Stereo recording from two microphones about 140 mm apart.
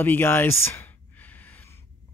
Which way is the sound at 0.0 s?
15° left (ahead or behind).